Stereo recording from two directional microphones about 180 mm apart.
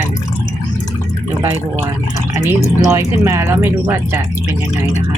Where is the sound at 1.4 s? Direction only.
15° right (ahead or behind).